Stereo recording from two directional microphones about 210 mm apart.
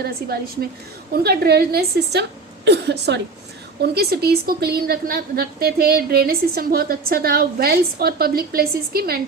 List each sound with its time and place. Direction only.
0.0 s a woman's voice: 45° right (ahead or behind)